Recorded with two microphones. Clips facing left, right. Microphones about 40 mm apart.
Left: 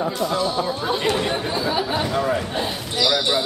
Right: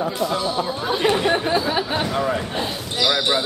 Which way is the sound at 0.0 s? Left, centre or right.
Centre.